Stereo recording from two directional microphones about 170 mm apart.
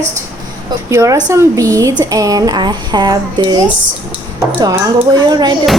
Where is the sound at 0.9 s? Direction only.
20° right (ahead or behind).